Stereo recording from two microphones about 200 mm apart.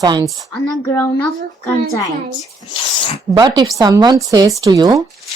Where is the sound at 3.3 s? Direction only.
20° right (ahead or behind).